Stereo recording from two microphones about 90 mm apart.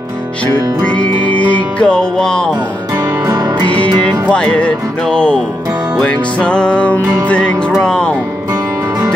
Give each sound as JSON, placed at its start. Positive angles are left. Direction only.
{"t": 0.8, "sound": "music", "side_deg": 10}
{"t": 2.9, "sound": "music", "side_deg": -50}
{"t": 3.6, "sound": "music", "side_deg": 15}